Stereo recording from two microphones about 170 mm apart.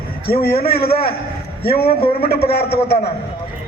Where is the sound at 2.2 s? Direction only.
65° left (ahead or behind).